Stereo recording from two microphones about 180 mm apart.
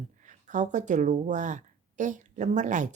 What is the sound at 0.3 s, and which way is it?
A woman's voice, 45° right (ahead or behind).